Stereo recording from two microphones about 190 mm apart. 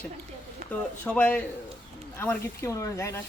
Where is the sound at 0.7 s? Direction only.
5° left (ahead or behind).